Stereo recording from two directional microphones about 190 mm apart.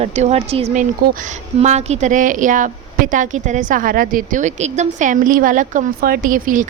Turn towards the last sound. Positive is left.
turn(degrees=-45)  # may be behind; listen again after turning